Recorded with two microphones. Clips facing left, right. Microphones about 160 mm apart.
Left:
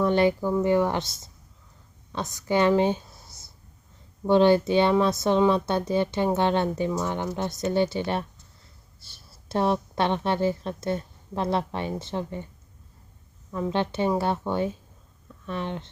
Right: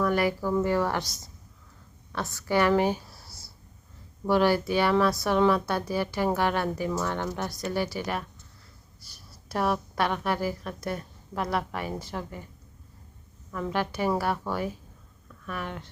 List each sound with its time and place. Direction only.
0.0 s a woman's voice: 25° left (ahead or behind)
13.5 s speech: 25° left (ahead or behind)